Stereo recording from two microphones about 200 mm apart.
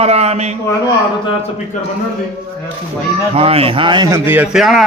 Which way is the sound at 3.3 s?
30° right (ahead or behind).